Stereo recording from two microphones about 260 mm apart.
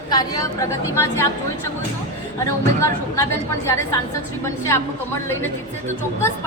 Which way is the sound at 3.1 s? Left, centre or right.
Centre.